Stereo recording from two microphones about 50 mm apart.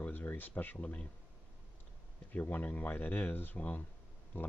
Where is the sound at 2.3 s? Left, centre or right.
Left.